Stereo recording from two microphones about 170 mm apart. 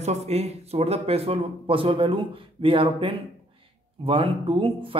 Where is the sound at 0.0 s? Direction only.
40° right (ahead or behind).